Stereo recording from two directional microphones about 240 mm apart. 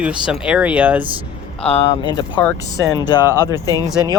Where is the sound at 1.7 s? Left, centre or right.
Left.